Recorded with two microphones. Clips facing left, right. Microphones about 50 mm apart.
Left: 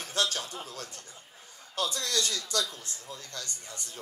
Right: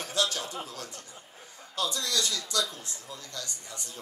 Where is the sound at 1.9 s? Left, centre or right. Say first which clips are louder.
Even; left.